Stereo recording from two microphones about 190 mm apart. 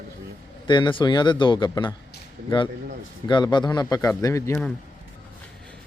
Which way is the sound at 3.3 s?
25° left (ahead or behind).